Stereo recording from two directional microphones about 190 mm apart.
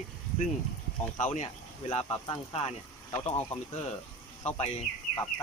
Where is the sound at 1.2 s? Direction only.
35° left (ahead or behind).